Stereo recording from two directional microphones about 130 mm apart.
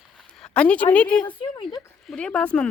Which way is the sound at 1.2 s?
30° left (ahead or behind).